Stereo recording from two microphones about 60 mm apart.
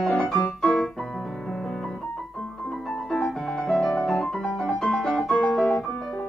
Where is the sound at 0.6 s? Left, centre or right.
Centre.